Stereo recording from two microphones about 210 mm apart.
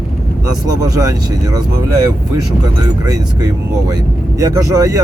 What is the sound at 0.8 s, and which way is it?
Speech, 15° right (ahead or behind).